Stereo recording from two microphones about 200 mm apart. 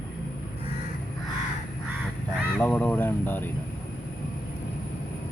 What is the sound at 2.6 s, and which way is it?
Speech, 10° left (ahead or behind).